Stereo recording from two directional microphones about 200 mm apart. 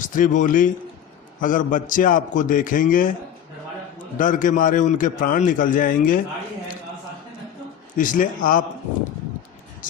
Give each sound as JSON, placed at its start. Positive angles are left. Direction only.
{"t": 0.0, "sound": "a man's voice", "side_deg": 40}
{"t": 4.2, "sound": "a man's voice", "side_deg": 40}
{"t": 7.9, "sound": "a man's voice", "side_deg": 40}